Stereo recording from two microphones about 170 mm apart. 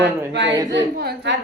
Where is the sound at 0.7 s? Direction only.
80° right.